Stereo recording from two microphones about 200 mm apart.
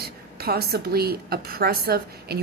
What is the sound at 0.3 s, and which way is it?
A woman's voice, 50° right (ahead or behind).